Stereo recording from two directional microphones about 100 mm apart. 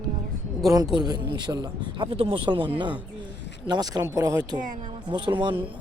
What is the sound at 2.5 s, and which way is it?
Speech, 55° right (ahead or behind).